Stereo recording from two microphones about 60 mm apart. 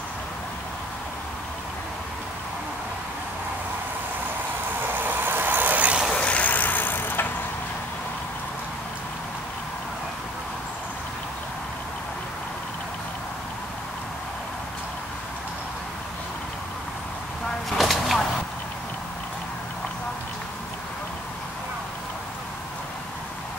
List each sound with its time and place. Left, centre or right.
4.8 s vehicle: right
6.1 s vehicle: left
17.6 s a sound: centre